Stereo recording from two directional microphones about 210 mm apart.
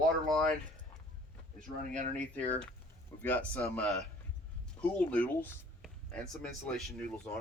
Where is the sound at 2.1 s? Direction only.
5° left (ahead or behind).